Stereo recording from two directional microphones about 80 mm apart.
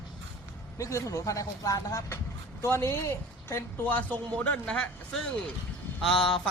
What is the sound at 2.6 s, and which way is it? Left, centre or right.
Speech, left.